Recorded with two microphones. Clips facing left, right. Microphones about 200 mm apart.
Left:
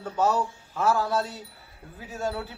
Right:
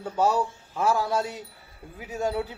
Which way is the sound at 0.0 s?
10° right (ahead or behind).